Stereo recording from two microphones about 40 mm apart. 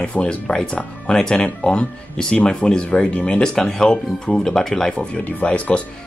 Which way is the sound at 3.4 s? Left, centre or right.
Centre.